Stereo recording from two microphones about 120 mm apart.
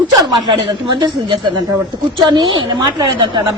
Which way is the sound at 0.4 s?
40° right (ahead or behind).